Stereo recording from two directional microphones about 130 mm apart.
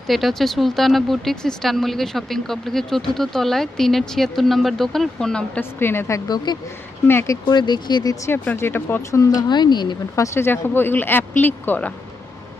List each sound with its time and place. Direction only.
0.1 s speech: centre (ahead or behind)
5.8 s speech: 20° left (ahead or behind)
7.1 s speech: 20° left (ahead or behind)
7.4 s speech: 35° left (ahead or behind)
10.2 s speech: 20° left (ahead or behind)